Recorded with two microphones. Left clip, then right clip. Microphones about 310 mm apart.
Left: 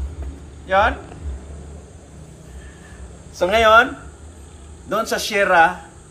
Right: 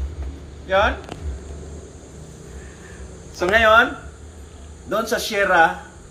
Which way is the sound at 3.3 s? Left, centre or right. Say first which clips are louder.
Even; left.